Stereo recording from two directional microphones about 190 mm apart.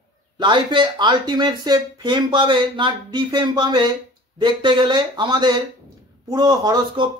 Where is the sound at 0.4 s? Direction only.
25° right (ahead or behind).